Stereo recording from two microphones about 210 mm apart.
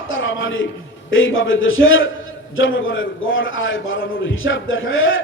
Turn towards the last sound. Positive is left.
turn(degrees=65)  # may be behind; listen again after turning